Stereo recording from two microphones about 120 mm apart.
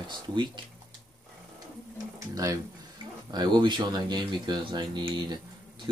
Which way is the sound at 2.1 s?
30° right (ahead or behind).